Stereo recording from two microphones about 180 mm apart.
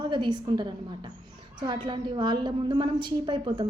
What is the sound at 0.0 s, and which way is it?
A woman's voice, 25° right (ahead or behind).